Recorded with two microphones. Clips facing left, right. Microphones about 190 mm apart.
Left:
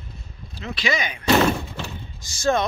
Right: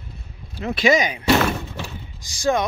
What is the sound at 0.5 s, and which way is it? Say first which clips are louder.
Speech: right 8 dB; 55° right (ahead or behind).